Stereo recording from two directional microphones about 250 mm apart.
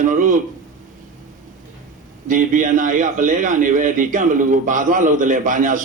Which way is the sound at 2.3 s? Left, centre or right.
Right.